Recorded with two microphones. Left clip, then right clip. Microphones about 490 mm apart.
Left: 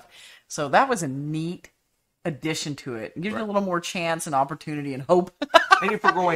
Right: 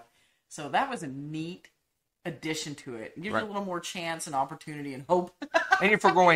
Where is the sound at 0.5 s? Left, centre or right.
Left.